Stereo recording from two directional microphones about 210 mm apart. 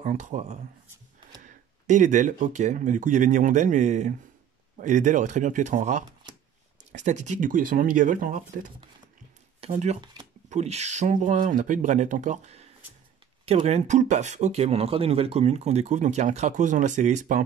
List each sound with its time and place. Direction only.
0.0 s speech: 35° right (ahead or behind)
6.2 s shuffling cards: 20° right (ahead or behind)
6.9 s speech: 35° right (ahead or behind)
9.6 s speech: 30° right (ahead or behind)